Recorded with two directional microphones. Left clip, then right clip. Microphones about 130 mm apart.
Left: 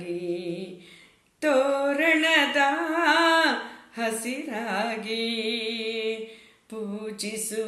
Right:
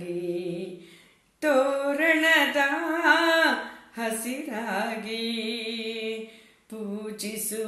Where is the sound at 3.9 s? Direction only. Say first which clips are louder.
Left 2 dB; 25° left (ahead or behind).